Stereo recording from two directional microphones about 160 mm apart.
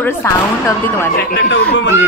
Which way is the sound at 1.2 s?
90° left.